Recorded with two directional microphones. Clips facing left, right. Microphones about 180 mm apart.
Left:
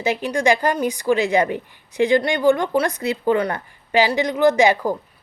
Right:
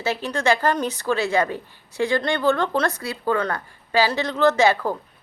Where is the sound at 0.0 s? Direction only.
15° left (ahead or behind).